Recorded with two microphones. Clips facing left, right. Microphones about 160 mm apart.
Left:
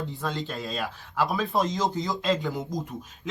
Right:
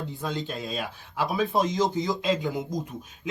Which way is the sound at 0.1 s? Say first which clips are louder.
Even; centre (ahead or behind).